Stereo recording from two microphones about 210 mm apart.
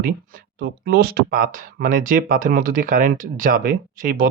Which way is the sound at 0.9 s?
45° right (ahead or behind).